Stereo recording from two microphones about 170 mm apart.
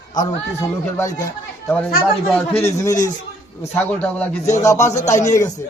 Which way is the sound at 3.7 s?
5° left (ahead or behind).